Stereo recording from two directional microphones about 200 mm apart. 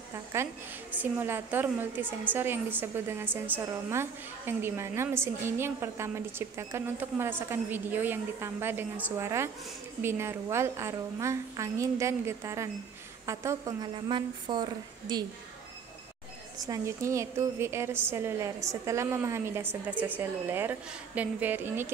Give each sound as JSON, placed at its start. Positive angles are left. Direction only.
{"t": 0.1, "sound": "a sound", "side_deg": -15}
{"t": 0.9, "sound": "a woman's voice", "side_deg": -10}
{"t": 16.6, "sound": "a woman's voice", "side_deg": -15}